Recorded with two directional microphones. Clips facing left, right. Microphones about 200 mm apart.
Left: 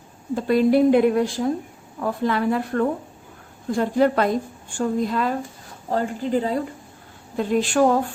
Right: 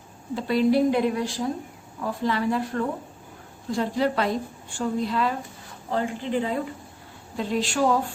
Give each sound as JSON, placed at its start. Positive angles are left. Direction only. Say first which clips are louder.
{"t": 0.3, "sound": "a woman's voice", "louder": "left 4 dB", "side_deg": 50}
{"t": 7.3, "sound": "a woman's voice", "louder": "left 6 dB", "side_deg": 50}